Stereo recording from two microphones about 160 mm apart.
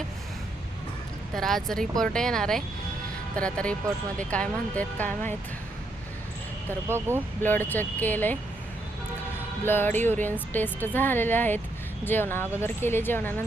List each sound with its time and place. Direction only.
1.4 s speech: centre (ahead or behind)
6.8 s speech: 15° right (ahead or behind)
7.4 s speech: 10° left (ahead or behind)
9.6 s speech: 15° left (ahead or behind)